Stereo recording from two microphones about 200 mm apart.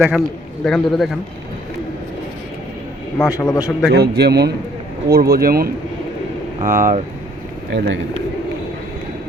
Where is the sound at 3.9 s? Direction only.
55° right (ahead or behind).